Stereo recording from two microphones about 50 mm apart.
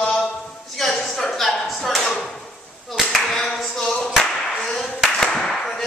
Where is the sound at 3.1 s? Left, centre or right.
Centre.